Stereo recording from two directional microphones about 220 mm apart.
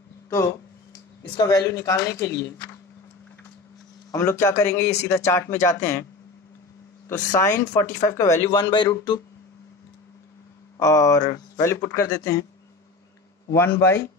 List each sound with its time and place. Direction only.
1.3 s speech: 15° left (ahead or behind)
4.1 s speech: 10° left (ahead or behind)
7.1 s speech: 15° left (ahead or behind)
10.8 s speech: 15° left (ahead or behind)
13.5 s speech: 10° left (ahead or behind)